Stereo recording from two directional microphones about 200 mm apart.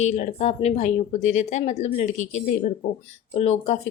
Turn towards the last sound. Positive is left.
turn(degrees=30)  # may be behind; listen again after turning